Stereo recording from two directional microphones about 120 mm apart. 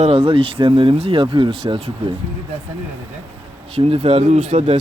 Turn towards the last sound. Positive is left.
turn(degrees=-65)  # may be behind; listen again after turning